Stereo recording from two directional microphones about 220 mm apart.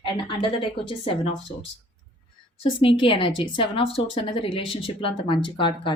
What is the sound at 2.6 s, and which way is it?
A woman's voice, 25° left (ahead or behind).